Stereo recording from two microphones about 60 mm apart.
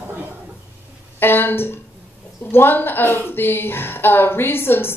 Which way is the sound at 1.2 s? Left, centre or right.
Left.